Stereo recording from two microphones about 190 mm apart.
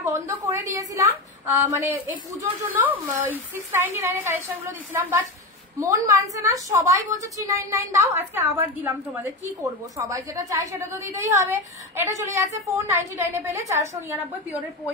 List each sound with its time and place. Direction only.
0.0 s a woman's voice: 15° right (ahead or behind)
5.8 s a woman's voice: 15° right (ahead or behind)